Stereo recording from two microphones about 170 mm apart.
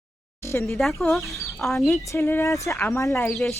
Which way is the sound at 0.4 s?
15° left (ahead or behind).